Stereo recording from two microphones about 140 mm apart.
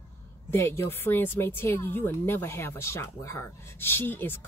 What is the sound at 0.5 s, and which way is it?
A woman's voice, 20° left (ahead or behind).